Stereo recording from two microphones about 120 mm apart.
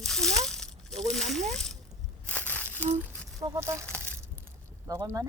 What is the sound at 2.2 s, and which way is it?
Crushing, 10° left (ahead or behind).